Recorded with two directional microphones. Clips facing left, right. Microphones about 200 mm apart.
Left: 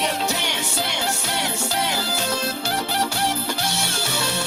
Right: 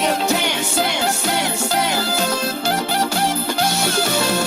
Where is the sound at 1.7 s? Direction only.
90° right.